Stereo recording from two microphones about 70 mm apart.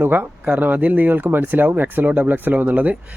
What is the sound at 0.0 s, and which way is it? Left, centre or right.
Speech, right.